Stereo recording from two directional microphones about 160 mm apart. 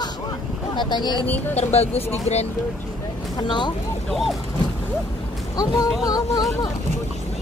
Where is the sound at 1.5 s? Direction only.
40° left (ahead or behind).